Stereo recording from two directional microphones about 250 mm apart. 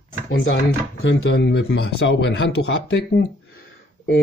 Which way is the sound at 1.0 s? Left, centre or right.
Left.